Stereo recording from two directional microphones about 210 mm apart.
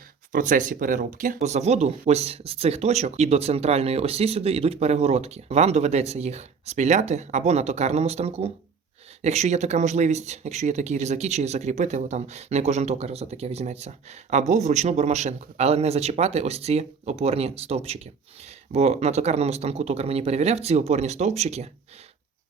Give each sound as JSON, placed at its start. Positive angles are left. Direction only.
{"t": 0.3, "sound": "speech", "side_deg": -40}